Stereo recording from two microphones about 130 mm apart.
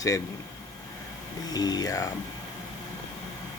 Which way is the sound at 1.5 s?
30° left (ahead or behind).